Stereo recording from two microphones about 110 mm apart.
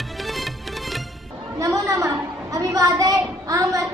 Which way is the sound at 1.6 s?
30° right (ahead or behind).